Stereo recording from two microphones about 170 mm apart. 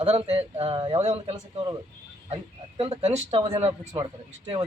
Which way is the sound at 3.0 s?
40° right (ahead or behind).